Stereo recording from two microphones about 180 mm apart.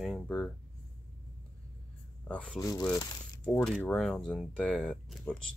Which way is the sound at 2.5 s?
20° left (ahead or behind).